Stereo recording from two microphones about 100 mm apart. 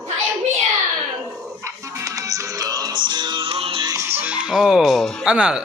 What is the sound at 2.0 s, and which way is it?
Music, 35° right (ahead or behind).